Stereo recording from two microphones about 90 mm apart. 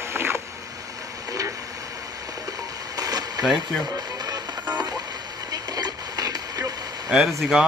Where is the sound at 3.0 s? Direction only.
45° right (ahead or behind).